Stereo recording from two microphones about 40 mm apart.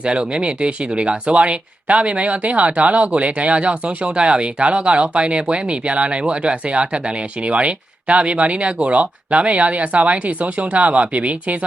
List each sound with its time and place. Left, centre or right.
0.0 s speech: right